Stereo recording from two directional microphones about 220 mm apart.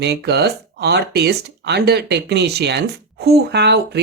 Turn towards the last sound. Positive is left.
turn(degrees=-50)  # may be behind; listen again after turning